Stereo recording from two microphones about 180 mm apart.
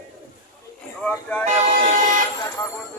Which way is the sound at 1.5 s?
45° right (ahead or behind).